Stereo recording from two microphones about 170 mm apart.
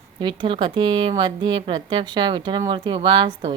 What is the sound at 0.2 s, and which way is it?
A woman's voice, 30° right (ahead or behind).